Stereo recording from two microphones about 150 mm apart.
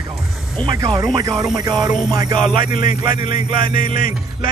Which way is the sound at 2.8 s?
55° left (ahead or behind).